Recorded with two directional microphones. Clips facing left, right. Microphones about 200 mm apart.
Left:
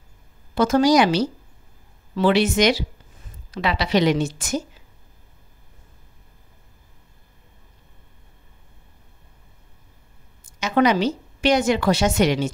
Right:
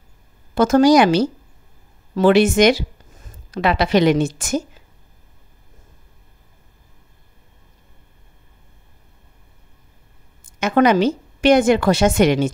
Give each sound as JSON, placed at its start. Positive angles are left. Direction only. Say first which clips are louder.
{"t": 0.6, "sound": "a woman's voice", "louder": "right 4 dB", "side_deg": -50}
{"t": 10.6, "sound": "a woman's voice", "louder": "right 4 dB", "side_deg": -50}